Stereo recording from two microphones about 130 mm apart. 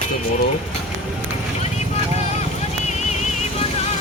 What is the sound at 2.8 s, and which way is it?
Music, 60° left (ahead or behind).